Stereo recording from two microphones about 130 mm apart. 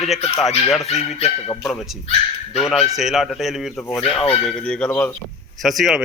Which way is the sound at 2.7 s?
Centre (ahead or behind).